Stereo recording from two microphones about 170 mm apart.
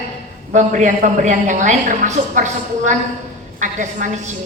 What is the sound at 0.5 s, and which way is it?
A woman's voice, 45° right (ahead or behind).